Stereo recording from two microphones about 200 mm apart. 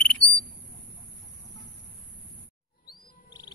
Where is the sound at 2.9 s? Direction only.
20° left (ahead or behind).